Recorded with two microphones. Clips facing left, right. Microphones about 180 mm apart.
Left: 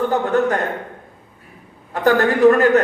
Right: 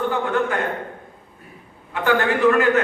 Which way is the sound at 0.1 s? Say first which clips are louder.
Left 4 dB; 40° left (ahead or behind).